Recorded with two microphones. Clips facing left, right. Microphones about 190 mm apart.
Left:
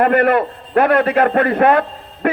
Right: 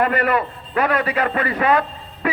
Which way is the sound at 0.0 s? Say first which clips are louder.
Left 6 dB; 55° left (ahead or behind).